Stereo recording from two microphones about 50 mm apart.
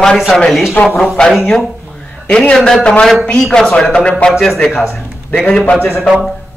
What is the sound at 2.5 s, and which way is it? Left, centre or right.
A man's voice, centre.